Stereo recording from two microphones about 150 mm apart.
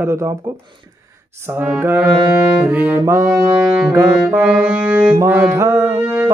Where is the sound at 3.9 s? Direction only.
10° right (ahead or behind).